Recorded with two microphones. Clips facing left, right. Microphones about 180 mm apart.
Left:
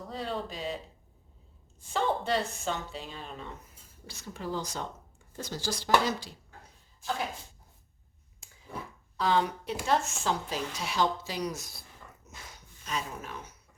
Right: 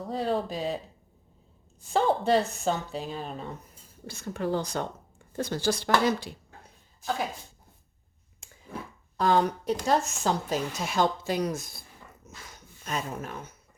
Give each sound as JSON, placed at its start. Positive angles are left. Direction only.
{"t": 0.1, "sound": "speech", "side_deg": -40}
{"t": 1.9, "sound": "speech", "side_deg": -40}
{"t": 4.0, "sound": "speech", "side_deg": -55}
{"t": 9.1, "sound": "a woman's voice", "side_deg": -50}